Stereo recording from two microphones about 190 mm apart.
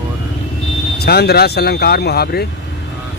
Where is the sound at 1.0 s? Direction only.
55° left (ahead or behind).